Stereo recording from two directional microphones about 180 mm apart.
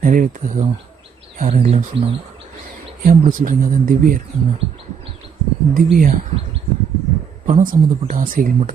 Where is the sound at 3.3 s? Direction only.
50° right (ahead or behind).